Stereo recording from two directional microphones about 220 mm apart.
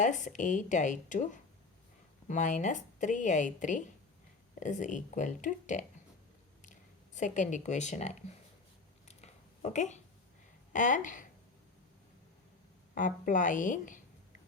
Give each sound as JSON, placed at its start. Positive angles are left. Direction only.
{"t": 0.0, "sound": "a woman's voice", "side_deg": 35}
{"t": 9.0, "sound": "a sound", "side_deg": 30}
{"t": 10.7, "sound": "speech", "side_deg": 35}
{"t": 12.9, "sound": "a woman's voice", "side_deg": 35}